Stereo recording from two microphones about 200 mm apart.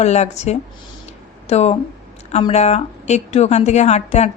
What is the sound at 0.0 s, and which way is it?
Speech, 35° left (ahead or behind).